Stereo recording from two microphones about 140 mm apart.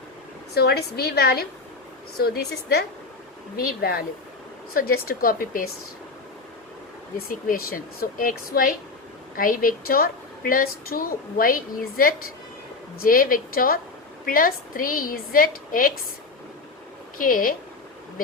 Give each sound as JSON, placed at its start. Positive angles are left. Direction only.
{"t": 0.9, "sound": "a woman's voice", "side_deg": 90}
{"t": 3.8, "sound": "a woman's voice", "side_deg": 90}
{"t": 7.2, "sound": "a woman's voice", "side_deg": 90}
{"t": 17.2, "sound": "a woman's voice", "side_deg": 80}